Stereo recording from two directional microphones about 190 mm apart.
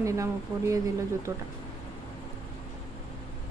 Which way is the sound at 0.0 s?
15° right (ahead or behind).